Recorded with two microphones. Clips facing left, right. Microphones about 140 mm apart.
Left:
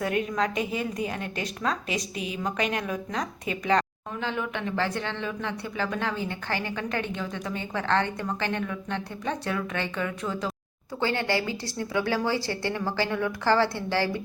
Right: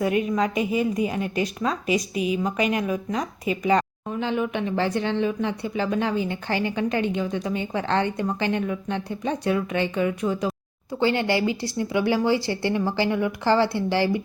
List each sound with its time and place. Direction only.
0.0 s speech: 10° right (ahead or behind)